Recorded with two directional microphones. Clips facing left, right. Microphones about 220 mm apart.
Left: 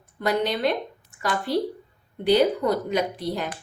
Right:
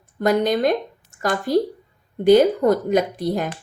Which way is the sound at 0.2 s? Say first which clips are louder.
Right 5 dB; 45° right (ahead or behind).